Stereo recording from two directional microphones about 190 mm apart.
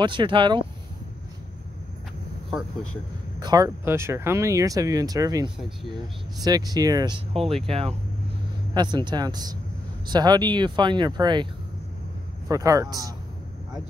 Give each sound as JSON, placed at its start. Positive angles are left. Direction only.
{"t": 0.0, "sound": "speech", "side_deg": -25}
{"t": 2.5, "sound": "speech", "side_deg": 5}
{"t": 3.3, "sound": "speech", "side_deg": -20}
{"t": 7.5, "sound": "speech", "side_deg": -30}
{"t": 12.4, "sound": "speech", "side_deg": -15}